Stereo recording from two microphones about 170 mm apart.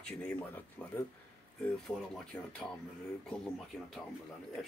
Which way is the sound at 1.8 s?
5° left (ahead or behind).